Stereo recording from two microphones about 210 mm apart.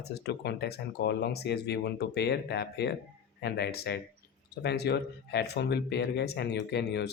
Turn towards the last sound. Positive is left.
turn(degrees=55)  # may be behind; listen again after turning